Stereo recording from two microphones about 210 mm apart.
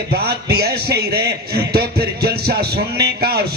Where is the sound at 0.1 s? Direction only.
50° right (ahead or behind).